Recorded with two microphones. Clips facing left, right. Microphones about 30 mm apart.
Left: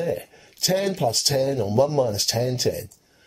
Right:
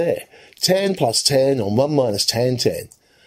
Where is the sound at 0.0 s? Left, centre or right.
Right.